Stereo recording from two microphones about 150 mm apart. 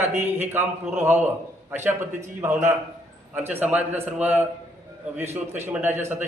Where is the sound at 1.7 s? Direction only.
15° right (ahead or behind).